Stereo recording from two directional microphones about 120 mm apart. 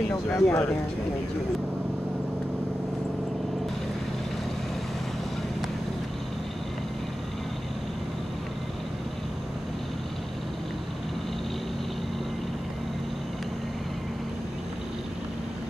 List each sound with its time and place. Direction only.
0.3 s speech: 25° left (ahead or behind)